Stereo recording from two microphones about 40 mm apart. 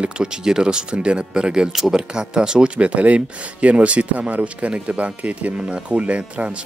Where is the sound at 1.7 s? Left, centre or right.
Centre.